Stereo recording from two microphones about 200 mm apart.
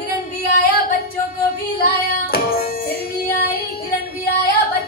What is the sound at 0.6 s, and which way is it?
Singing, 50° left (ahead or behind).